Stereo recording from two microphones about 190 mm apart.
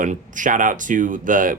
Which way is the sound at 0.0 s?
45° right (ahead or behind).